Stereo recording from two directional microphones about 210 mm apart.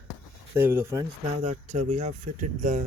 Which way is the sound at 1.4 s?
35° right (ahead or behind).